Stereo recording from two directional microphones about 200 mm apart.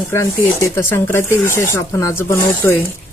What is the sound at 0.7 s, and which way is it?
Speech, 10° left (ahead or behind).